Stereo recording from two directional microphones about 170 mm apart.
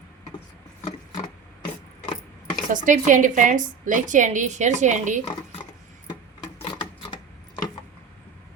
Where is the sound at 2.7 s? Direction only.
50° right (ahead or behind).